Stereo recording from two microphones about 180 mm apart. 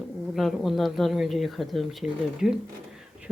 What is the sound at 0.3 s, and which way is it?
Speech, centre (ahead or behind).